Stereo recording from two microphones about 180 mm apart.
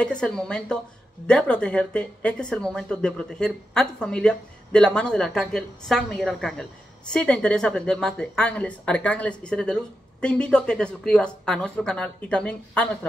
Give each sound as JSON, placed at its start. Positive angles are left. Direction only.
{"t": 0.0, "sound": "speech", "side_deg": 5}